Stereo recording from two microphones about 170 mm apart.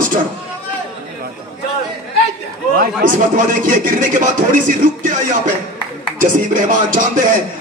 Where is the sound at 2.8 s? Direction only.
55° right (ahead or behind).